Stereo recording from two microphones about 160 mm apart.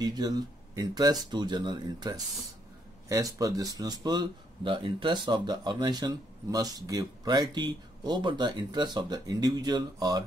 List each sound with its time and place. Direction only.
0.0 s speech: 25° right (ahead or behind)